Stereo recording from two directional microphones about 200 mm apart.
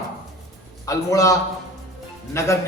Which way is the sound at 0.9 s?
15° left (ahead or behind).